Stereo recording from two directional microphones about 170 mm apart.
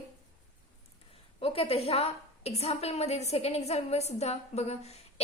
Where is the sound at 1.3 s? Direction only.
35° left (ahead or behind).